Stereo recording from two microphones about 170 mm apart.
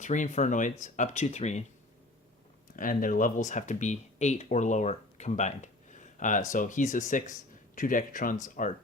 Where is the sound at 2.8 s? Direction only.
55° left (ahead or behind).